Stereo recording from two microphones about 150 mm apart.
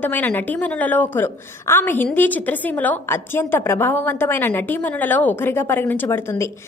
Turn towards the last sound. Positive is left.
turn(degrees=15)  # may be behind; listen again after turning